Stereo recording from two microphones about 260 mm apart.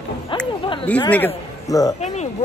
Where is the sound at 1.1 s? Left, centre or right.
Centre.